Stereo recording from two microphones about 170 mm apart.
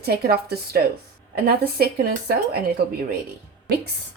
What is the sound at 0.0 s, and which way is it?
Speech, 65° right (ahead or behind).